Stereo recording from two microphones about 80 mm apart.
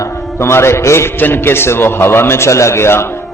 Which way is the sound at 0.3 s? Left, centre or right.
Left.